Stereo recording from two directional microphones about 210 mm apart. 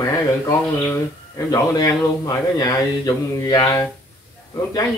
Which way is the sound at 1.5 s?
20° left (ahead or behind).